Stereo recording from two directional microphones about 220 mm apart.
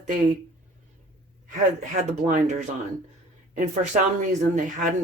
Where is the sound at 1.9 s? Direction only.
35° right (ahead or behind).